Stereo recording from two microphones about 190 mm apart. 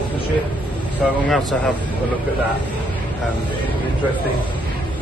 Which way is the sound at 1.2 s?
Centre (ahead or behind).